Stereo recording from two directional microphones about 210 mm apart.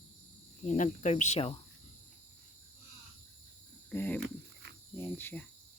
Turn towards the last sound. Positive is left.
turn(degrees=10)  # may be behind; listen again after turning